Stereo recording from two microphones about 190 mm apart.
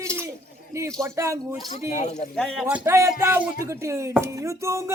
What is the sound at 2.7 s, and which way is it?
Speech, 15° right (ahead or behind).